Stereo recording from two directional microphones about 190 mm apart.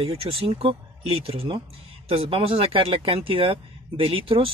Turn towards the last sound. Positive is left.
turn(degrees=-30)  # may be behind; listen again after turning